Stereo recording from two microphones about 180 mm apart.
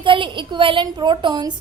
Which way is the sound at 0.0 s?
25° right (ahead or behind).